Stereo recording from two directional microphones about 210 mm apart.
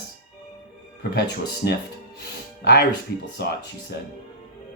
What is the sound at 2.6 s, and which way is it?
Speech, 50° left (ahead or behind).